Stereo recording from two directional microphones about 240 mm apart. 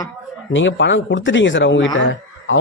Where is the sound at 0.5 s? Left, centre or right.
Left.